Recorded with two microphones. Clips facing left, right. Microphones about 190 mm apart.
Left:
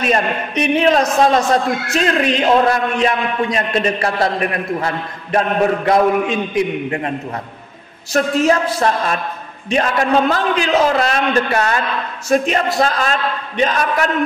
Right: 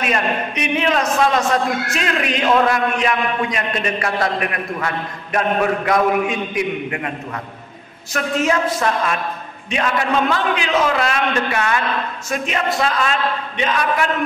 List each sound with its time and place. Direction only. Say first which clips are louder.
0.0 s a man's voice: left 3 dB; 35° left (ahead or behind)
8.1 s a man's voice: left 4 dB; 35° left (ahead or behind)